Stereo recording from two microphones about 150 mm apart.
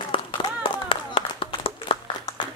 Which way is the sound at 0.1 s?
35° left (ahead or behind).